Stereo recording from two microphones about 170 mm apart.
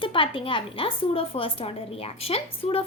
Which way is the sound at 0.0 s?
30° left (ahead or behind).